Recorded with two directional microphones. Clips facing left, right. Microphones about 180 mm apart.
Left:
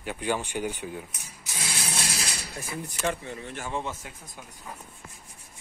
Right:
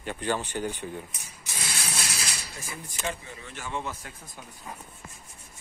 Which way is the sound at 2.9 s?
55° left (ahead or behind).